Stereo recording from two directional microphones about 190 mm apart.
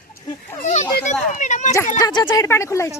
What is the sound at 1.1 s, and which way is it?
Speech, 40° left (ahead or behind).